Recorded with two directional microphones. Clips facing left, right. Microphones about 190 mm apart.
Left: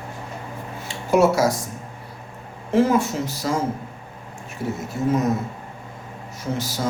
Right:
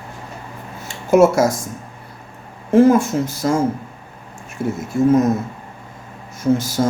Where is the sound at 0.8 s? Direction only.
45° right (ahead or behind).